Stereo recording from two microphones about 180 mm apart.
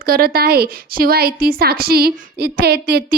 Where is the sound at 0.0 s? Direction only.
55° right (ahead or behind).